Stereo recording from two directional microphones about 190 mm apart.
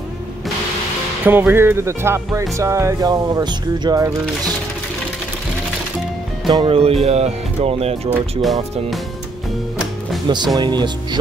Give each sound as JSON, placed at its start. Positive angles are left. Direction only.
{"t": 1.2, "sound": "speech", "side_deg": -10}
{"t": 6.4, "sound": "speech", "side_deg": -25}
{"t": 8.4, "sound": "speech", "side_deg": 0}
{"t": 10.2, "sound": "speech", "side_deg": -25}